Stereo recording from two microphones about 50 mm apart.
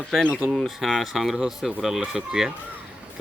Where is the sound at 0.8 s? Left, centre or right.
Centre.